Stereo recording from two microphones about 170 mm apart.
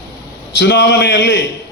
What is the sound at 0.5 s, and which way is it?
Speech, 90° left.